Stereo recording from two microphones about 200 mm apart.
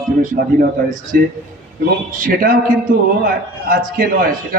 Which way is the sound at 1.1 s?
45° right (ahead or behind).